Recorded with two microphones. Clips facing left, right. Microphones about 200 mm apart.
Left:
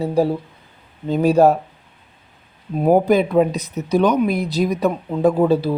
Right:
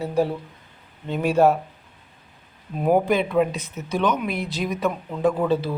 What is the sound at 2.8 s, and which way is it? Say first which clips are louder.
Speech: left 5 dB; 40° left (ahead or behind).